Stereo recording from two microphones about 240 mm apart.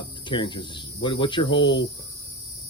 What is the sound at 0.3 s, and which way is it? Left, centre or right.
Speech, centre.